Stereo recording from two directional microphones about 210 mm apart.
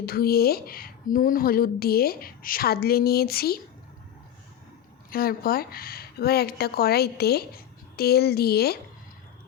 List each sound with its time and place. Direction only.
0.0 s speech: 45° left (ahead or behind)
5.1 s speech: 45° left (ahead or behind)